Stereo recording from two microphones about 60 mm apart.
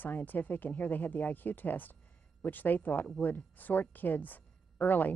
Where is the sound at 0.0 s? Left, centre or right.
Left.